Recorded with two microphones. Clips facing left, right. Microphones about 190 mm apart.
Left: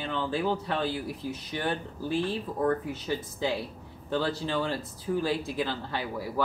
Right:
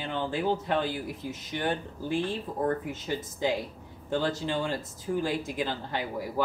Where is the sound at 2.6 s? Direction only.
20° right (ahead or behind).